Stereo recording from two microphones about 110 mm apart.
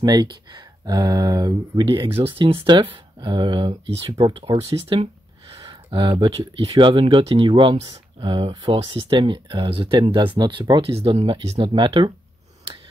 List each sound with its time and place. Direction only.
0.0 s speech: 35° right (ahead or behind)
2.1 s speech: 55° right (ahead or behind)